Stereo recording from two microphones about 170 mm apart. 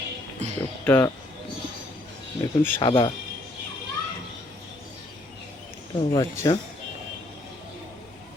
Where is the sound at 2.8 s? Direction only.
30° left (ahead or behind).